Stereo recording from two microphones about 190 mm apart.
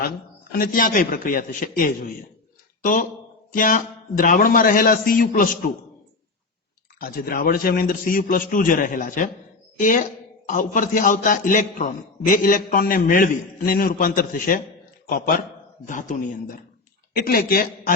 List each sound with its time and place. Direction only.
0.5 s a man's voice: 45° left (ahead or behind)
7.0 s a man's voice: 50° left (ahead or behind)
15.9 s a man's voice: 45° left (ahead or behind)